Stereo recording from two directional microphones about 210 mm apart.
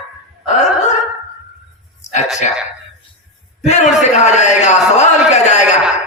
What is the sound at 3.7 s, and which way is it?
Speech, 35° left (ahead or behind).